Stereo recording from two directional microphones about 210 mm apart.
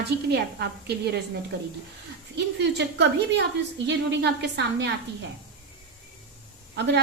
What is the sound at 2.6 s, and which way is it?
A woman's voice, 55° right (ahead or behind).